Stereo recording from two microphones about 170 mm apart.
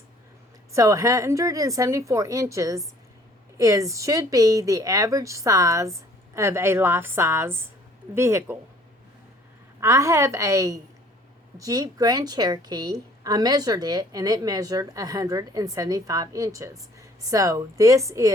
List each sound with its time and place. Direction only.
0.7 s a woman's voice: 20° right (ahead or behind)
9.8 s a woman's voice: 15° right (ahead or behind)